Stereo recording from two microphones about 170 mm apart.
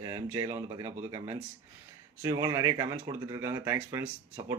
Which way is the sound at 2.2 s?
20° right (ahead or behind).